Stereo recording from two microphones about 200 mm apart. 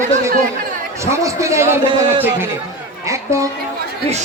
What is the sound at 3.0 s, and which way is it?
Speech, 15° right (ahead or behind).